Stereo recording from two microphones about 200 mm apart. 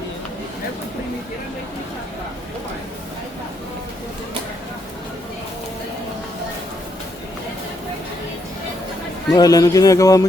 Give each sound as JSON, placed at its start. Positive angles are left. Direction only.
{"t": 9.3, "sound": "speech", "side_deg": 20}